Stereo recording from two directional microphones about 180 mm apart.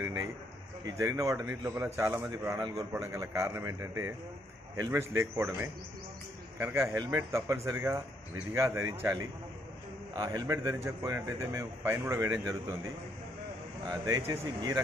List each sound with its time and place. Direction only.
0.0 s a man's voice: 15° right (ahead or behind)
10.1 s a man's voice: 20° right (ahead or behind)
13.8 s a man's voice: 20° right (ahead or behind)